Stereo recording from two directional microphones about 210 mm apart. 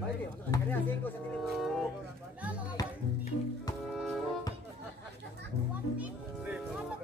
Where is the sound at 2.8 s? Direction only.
20° left (ahead or behind).